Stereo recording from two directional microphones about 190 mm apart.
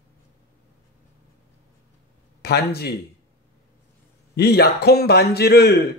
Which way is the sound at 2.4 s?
60° left (ahead or behind).